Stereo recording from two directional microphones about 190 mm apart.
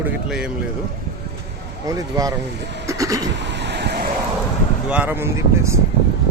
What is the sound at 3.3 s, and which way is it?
Cough, 65° right (ahead or behind).